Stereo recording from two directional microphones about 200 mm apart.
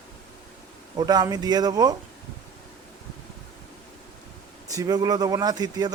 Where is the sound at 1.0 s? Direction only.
20° right (ahead or behind).